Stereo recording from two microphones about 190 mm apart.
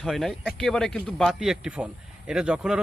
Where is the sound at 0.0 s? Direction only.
Centre (ahead or behind).